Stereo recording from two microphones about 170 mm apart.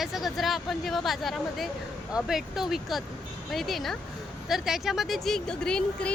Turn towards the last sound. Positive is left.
turn(degrees=5)  # may be behind; listen again after turning